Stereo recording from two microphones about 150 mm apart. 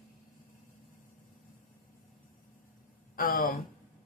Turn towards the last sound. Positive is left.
turn(degrees=70)  # may be behind; listen again after turning